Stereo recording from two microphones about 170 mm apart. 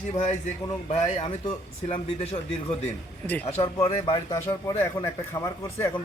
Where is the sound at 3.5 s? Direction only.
35° left (ahead or behind).